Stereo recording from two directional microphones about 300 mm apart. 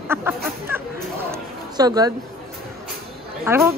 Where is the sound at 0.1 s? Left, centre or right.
Centre.